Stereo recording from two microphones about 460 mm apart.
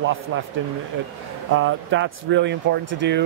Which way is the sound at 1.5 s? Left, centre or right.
Right.